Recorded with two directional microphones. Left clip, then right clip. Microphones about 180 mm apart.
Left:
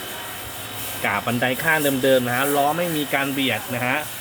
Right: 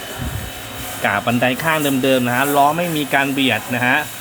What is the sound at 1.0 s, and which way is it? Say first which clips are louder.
Speech: right 5 dB; 20° right (ahead or behind).